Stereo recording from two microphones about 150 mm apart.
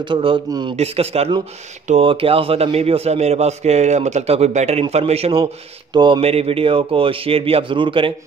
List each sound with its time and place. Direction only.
0.0 s a man's voice: 35° right (ahead or behind)
0.7 s a man's voice: 45° right (ahead or behind)